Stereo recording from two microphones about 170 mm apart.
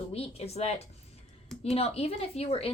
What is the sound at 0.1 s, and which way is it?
A woman's voice, 35° left (ahead or behind).